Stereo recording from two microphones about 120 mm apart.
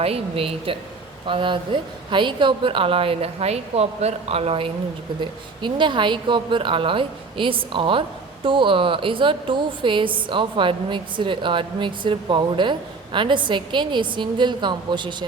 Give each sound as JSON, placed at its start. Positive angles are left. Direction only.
{"t": 0.0, "sound": "a woman's voice", "side_deg": -55}
{"t": 5.2, "sound": "a woman's voice", "side_deg": -40}